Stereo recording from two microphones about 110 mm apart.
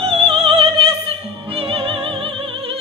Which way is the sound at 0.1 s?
55° right (ahead or behind).